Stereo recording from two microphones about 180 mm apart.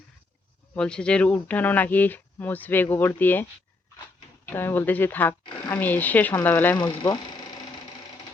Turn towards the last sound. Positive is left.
turn(degrees=25)  # may be behind; listen again after turning